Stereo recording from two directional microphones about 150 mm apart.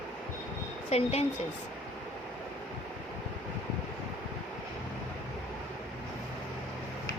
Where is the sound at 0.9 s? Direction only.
45° left (ahead or behind).